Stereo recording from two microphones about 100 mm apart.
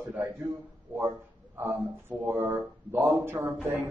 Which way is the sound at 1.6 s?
20° right (ahead or behind).